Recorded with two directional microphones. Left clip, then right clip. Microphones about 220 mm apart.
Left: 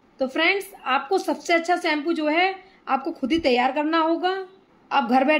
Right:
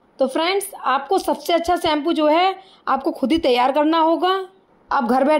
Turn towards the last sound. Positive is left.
turn(degrees=-35)  # may be behind; listen again after turning